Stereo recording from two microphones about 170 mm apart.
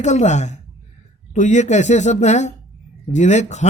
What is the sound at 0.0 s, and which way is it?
Speech, 45° left (ahead or behind).